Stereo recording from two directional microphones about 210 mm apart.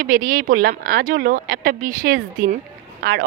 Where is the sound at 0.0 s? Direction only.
40° right (ahead or behind).